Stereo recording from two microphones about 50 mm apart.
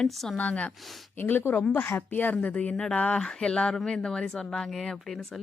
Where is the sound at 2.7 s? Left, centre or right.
Centre.